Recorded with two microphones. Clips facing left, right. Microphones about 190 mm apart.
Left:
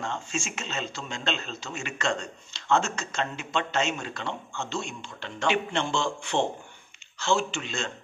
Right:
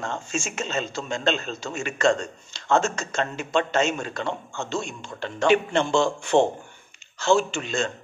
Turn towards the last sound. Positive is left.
turn(degrees=-45)  # may be behind; listen again after turning